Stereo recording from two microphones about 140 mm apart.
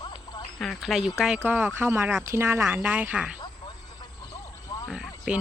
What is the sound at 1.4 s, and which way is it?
Speech, 15° right (ahead or behind).